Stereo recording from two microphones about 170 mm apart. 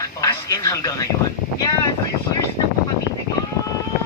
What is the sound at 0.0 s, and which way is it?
Speech, 20° left (ahead or behind).